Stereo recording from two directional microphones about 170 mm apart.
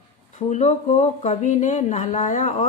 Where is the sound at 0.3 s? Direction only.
40° left (ahead or behind).